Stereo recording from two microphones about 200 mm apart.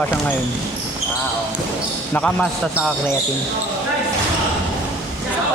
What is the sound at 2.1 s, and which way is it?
Speech, 5° left (ahead or behind).